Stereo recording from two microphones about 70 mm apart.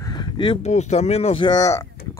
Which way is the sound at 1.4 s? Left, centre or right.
Left.